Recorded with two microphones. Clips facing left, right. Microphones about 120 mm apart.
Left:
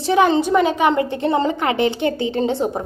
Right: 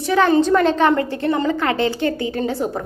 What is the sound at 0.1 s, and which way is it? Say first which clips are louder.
A woman's voice: even; 15° left (ahead or behind).